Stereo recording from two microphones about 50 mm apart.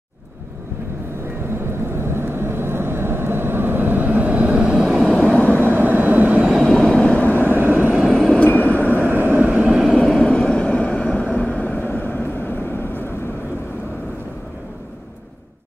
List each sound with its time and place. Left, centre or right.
2.0 s vehicle: right; by 4.9 s centre
5.2 s vehicle: left
5.5 s vehicle: right
6.6 s vehicle: centre
7.1 s vehicle: left
7.5 s vehicle: right
8.1 s vehicle: centre
8.5 s vehicle: left
8.8 s vehicle: right
9.6 s vehicle: centre
9.9 s vehicle: centre; by 13.0 s left